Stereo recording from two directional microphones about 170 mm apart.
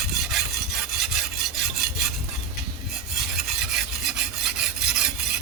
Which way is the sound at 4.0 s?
5° right (ahead or behind).